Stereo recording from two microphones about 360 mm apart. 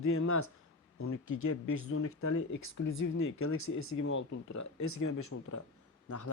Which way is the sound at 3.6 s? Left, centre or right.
Left.